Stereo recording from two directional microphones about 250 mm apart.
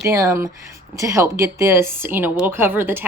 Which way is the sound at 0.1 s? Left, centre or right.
Centre.